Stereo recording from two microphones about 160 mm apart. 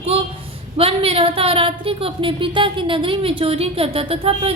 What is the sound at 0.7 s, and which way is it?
A woman's voice, 35° right (ahead or behind).